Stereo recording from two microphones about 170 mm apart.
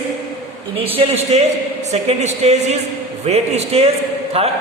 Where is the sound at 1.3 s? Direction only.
40° right (ahead or behind).